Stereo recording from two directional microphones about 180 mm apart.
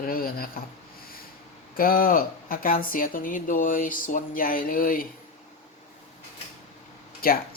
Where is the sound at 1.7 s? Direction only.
50° left (ahead or behind).